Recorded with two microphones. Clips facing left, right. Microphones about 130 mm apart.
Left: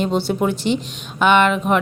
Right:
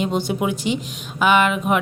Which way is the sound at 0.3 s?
10° right (ahead or behind).